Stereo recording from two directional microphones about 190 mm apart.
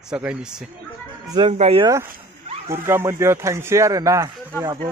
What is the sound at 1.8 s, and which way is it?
Speech, 15° right (ahead or behind).